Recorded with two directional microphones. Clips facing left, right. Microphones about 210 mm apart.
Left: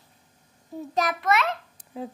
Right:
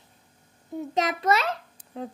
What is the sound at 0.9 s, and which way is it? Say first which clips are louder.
Speech: even; 25° right (ahead or behind).